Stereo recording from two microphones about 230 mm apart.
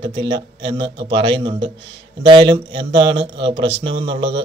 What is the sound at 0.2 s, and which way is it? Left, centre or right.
Speech, centre.